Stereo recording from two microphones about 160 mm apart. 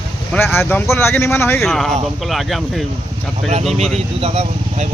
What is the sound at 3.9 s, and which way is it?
Speech, 40° right (ahead or behind).